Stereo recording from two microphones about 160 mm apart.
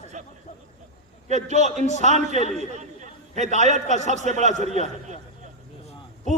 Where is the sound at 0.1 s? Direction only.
50° right (ahead or behind).